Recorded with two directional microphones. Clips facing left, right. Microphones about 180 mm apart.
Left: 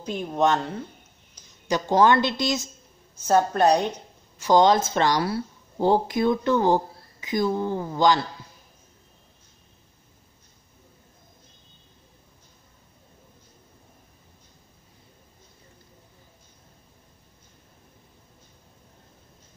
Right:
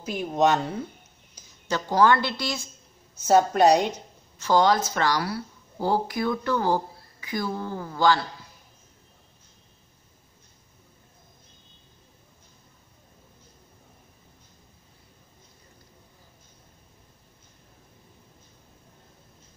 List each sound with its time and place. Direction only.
0.0 s speech: 5° right (ahead or behind)
1.7 s a woman's voice: 20° left (ahead or behind)
3.3 s speech: 10° right (ahead or behind)
4.4 s a woman's voice: 20° left (ahead or behind)